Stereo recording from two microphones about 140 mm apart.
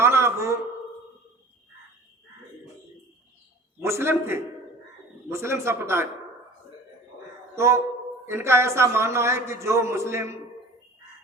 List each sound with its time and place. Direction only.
0.0 s a sound: 20° right (ahead or behind)
3.8 s a man's voice: 20° right (ahead or behind)
7.5 s a man's voice: 20° right (ahead or behind)